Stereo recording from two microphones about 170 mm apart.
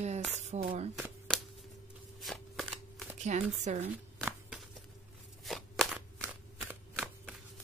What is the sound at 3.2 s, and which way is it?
Speech, 45° right (ahead or behind).